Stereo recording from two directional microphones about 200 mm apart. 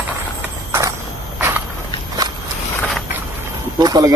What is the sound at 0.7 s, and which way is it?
Creak, 15° right (ahead or behind).